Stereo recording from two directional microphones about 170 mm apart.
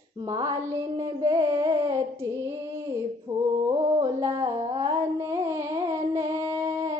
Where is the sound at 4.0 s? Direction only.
20° right (ahead or behind).